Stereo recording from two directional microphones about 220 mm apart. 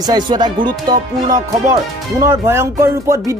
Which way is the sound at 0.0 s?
20° right (ahead or behind).